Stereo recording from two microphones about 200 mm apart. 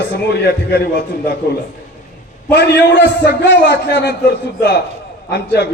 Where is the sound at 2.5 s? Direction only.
60° left (ahead or behind).